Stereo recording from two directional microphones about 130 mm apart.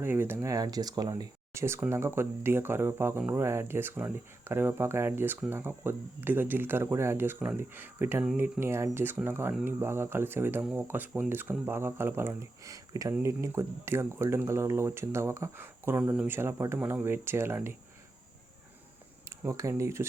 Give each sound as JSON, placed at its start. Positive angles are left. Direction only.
{"t": 0.0, "sound": "speech", "side_deg": -20}
{"t": 19.5, "sound": "speech", "side_deg": -25}